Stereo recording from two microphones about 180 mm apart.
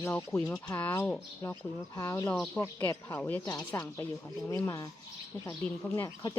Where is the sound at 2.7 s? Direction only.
15° left (ahead or behind).